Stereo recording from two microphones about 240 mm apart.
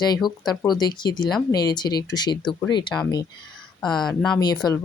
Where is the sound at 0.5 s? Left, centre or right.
Centre.